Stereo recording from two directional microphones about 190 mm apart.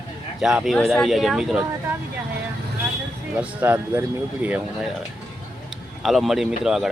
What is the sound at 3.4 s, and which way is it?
Speech, 10° right (ahead or behind).